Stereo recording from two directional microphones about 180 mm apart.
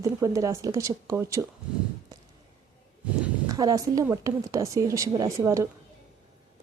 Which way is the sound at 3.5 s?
20° right (ahead or behind).